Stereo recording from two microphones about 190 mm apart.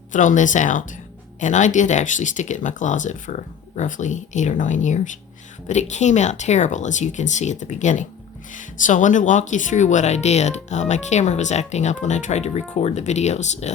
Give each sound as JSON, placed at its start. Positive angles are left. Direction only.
{"t": 0.1, "sound": "speech", "side_deg": 40}